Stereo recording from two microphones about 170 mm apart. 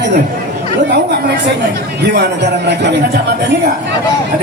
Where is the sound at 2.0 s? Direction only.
75° right (ahead or behind).